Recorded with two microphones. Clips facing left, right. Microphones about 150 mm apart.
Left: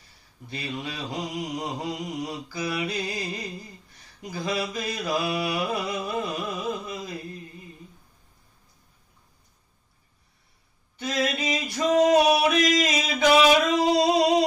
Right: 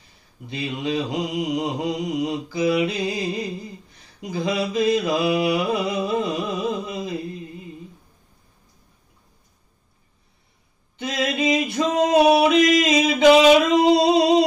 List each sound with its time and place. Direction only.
0.5 s mantra: 15° right (ahead or behind)
11.0 s male singing: 20° right (ahead or behind)
12.4 s a sound: 20° right (ahead or behind)